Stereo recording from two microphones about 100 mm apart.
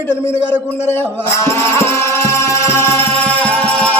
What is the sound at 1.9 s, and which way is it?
Music, 30° left (ahead or behind).